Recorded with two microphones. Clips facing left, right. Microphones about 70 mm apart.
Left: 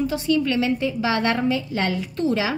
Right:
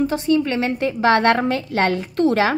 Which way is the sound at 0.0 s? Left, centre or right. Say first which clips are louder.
Right 3 dB; right.